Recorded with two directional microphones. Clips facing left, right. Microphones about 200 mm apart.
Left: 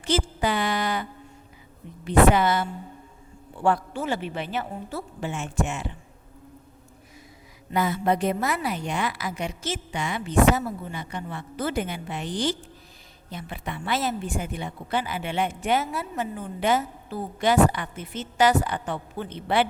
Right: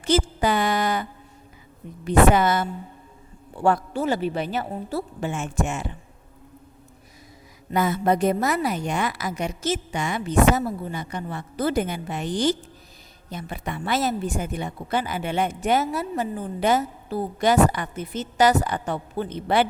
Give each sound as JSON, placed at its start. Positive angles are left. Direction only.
{"t": 0.0, "sound": "a woman's voice", "side_deg": -45}
{"t": 2.0, "sound": "a woman's voice", "side_deg": -45}
{"t": 7.7, "sound": "a woman's voice", "side_deg": -45}